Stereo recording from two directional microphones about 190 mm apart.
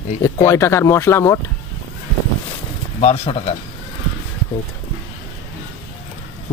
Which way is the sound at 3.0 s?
30° left (ahead or behind).